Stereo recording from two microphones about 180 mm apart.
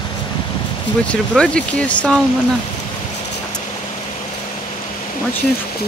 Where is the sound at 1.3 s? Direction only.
5° left (ahead or behind).